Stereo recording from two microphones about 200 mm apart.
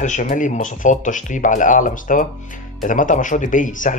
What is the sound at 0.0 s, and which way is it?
Speech, 40° left (ahead or behind).